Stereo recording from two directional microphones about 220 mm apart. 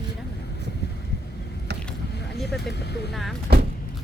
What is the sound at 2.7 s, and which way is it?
Speech, 50° left (ahead or behind).